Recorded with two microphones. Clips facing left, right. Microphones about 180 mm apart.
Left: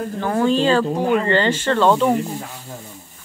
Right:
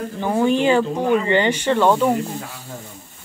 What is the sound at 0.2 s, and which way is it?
Speech, 15° right (ahead or behind).